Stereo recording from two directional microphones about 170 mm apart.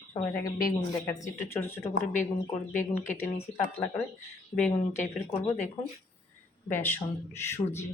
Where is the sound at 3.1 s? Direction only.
15° left (ahead or behind).